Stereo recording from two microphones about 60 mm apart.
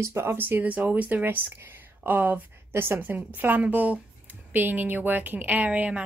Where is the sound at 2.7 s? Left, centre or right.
Right.